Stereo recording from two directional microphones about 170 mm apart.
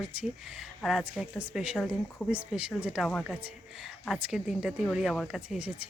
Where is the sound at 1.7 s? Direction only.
5° left (ahead or behind).